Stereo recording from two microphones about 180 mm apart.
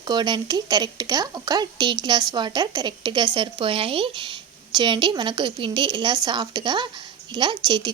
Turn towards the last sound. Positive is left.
turn(degrees=-25)  # may be behind; listen again after turning